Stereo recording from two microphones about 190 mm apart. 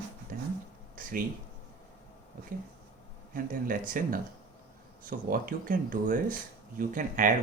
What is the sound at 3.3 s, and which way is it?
Speech, 50° right (ahead or behind).